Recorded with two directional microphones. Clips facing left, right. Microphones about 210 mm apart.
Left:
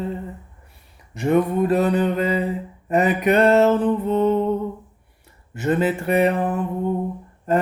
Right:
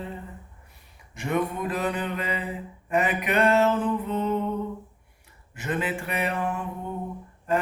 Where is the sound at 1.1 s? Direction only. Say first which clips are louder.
Left 8 dB; 35° left (ahead or behind).